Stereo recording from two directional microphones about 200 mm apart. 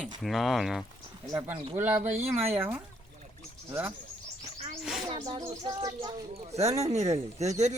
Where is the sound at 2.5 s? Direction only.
10° right (ahead or behind).